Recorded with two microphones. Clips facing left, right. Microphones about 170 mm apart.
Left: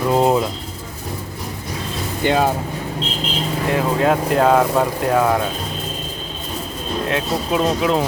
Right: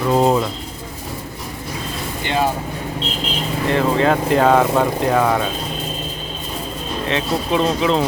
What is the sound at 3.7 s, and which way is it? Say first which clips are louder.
Speech: right 1 dB; 5° left (ahead or behind).